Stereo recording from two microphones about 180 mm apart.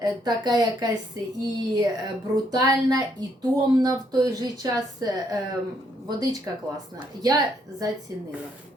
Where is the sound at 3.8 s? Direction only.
20° right (ahead or behind).